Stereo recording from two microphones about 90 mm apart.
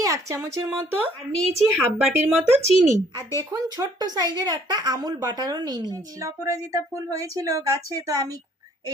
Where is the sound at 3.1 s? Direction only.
40° right (ahead or behind).